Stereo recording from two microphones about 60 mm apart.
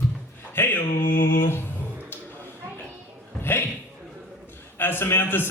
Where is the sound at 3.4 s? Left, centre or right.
Left.